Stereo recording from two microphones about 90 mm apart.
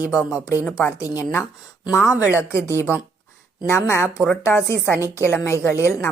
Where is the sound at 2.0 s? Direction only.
30° left (ahead or behind).